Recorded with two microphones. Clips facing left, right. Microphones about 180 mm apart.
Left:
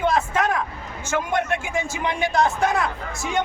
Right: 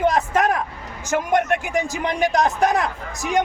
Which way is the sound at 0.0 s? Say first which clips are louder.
Right 3 dB; 40° right (ahead or behind).